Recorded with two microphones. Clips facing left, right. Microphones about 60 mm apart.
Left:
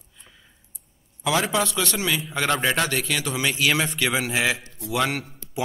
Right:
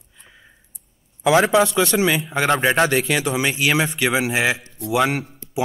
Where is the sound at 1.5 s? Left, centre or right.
Right.